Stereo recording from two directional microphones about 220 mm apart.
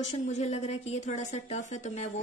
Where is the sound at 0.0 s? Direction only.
30° left (ahead or behind).